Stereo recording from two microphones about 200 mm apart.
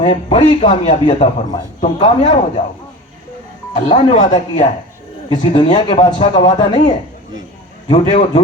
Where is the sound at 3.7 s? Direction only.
30° left (ahead or behind).